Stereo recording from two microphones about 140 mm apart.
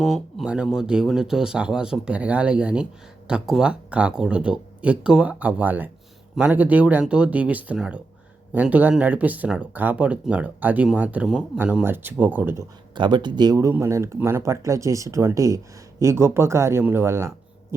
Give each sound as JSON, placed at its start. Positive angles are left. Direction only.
{"t": 0.0, "sound": "speech", "side_deg": 0}
{"t": 12.9, "sound": "speech", "side_deg": -35}